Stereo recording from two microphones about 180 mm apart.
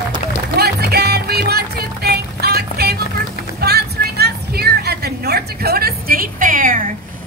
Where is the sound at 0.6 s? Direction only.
65° right (ahead or behind).